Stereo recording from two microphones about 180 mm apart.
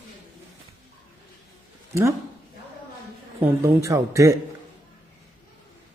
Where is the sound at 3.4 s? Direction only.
15° right (ahead or behind).